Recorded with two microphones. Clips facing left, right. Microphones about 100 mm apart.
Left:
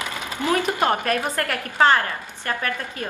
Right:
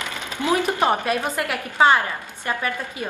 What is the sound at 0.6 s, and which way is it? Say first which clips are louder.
A woman's voice: right 1 dB; 10° right (ahead or behind).